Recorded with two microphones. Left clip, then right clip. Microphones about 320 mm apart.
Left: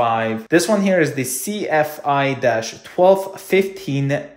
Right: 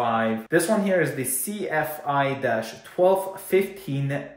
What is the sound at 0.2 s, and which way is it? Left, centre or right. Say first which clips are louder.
Speech: left 5 dB; left.